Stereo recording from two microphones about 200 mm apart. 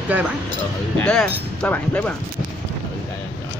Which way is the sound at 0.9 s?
5° left (ahead or behind).